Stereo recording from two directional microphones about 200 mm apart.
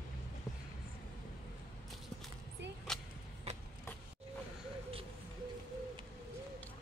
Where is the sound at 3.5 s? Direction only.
30° right (ahead or behind).